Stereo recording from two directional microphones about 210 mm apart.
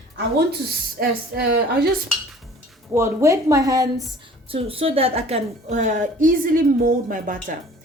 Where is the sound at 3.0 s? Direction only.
15° right (ahead or behind); by 7.6 s 40° right (ahead or behind).